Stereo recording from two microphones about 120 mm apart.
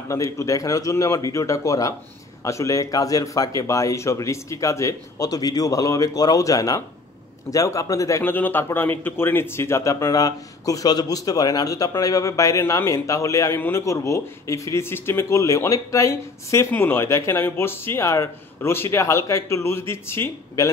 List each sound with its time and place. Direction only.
0.1 s a man's voice: 25° left (ahead or behind)
8.2 s a man's voice: 15° left (ahead or behind)